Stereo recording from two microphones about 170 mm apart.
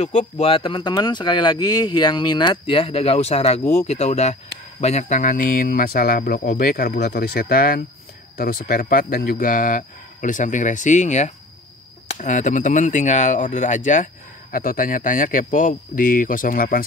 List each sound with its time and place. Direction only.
0.0 s speech: 40° left (ahead or behind)